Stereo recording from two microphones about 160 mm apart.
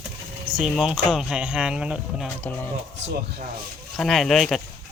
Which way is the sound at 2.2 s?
10° left (ahead or behind).